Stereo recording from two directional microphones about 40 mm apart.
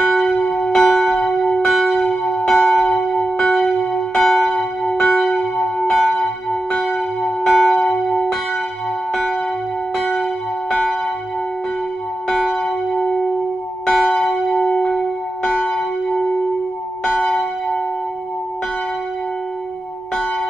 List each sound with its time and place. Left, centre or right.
0.0 s church bell: left
10.7 s church bell: centre
12.4 s church bell: centre
14.6 s a sound: left
14.9 s church bell: centre